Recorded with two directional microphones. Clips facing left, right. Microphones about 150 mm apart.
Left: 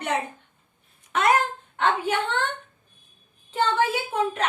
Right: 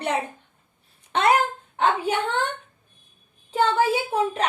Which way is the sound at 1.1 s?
30° right (ahead or behind).